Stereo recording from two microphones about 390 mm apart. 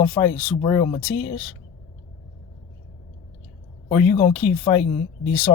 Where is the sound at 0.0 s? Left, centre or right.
Centre.